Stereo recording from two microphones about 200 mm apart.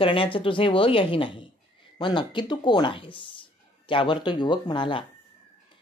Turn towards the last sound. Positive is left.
turn(degrees=25)  # may be behind; listen again after turning